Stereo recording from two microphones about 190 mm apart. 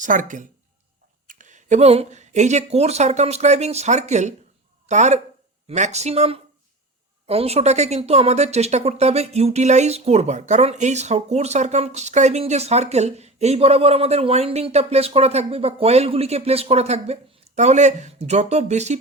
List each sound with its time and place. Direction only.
0.0 s speech: 45° right (ahead or behind)